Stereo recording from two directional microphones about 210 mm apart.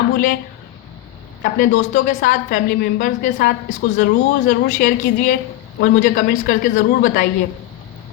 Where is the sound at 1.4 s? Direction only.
45° left (ahead or behind).